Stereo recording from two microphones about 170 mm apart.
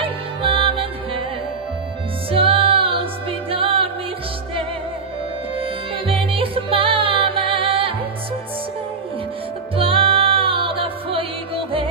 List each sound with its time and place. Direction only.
0.0 s music: 30° right (ahead or behind)
2.3 s music: 30° right (ahead or behind)
5.6 s music: 30° right (ahead or behind)
9.8 s music: 30° right (ahead or behind)